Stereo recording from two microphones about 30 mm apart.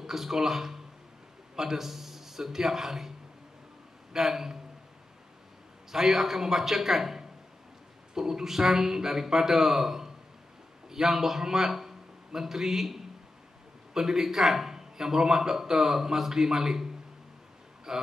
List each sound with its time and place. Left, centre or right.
0.0 s a man's voice: centre
4.1 s a man's voice: centre
5.9 s a man's voice: centre